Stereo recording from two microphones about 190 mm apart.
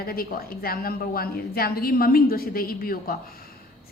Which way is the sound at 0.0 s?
50° left (ahead or behind).